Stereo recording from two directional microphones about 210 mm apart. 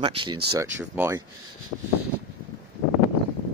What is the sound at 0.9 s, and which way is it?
Speech, 10° right (ahead or behind).